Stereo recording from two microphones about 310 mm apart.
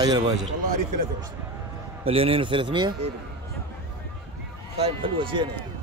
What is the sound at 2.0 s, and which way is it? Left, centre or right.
A man's voice, centre.